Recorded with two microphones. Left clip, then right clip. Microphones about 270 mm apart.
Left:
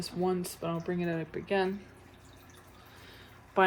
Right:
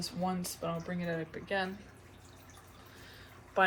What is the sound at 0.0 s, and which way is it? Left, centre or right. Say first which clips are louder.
Speech: left 4 dB; left.